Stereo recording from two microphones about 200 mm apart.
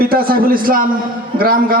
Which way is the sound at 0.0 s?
50° right (ahead or behind).